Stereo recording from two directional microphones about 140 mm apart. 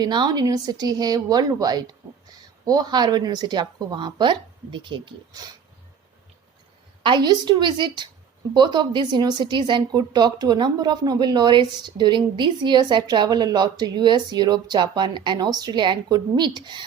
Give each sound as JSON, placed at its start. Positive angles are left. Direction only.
{"t": 0.0, "sound": "a woman's voice", "side_deg": -30}
{"t": 7.0, "sound": "a woman's voice", "side_deg": -35}